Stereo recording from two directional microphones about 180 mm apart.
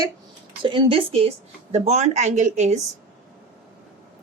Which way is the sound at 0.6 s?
25° right (ahead or behind).